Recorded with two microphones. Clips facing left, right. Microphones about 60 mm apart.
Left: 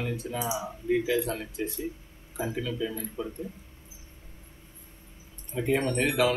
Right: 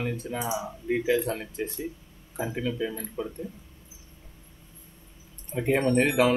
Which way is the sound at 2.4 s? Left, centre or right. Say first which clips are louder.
Right 2 dB; right.